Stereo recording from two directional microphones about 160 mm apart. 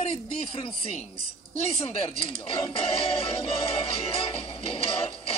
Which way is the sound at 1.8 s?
35° left (ahead or behind).